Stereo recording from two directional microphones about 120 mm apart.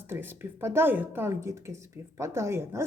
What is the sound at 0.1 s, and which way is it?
A woman's voice, 20° right (ahead or behind).